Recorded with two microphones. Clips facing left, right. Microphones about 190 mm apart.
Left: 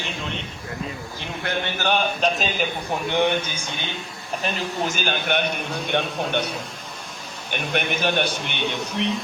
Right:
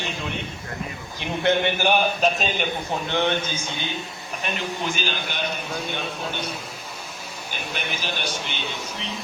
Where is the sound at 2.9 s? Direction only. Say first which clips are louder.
Left 3 dB; 15° left (ahead or behind).